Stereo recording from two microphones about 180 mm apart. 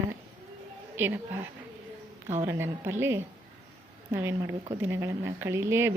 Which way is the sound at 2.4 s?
15° right (ahead or behind).